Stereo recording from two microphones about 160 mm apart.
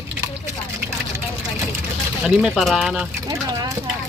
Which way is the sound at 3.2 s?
25° right (ahead or behind).